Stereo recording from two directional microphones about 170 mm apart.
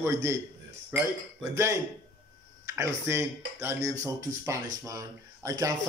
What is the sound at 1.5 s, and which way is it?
A man's voice, 20° right (ahead or behind).